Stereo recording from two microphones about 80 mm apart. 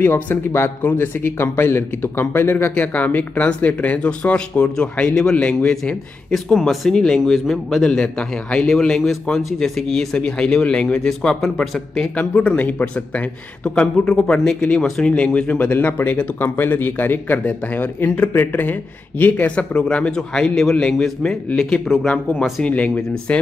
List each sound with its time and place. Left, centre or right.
0.0 s speech: left; by 12.1 s centre
12.2 s speech: centre
21.9 s speech: centre
22.4 s speech: centre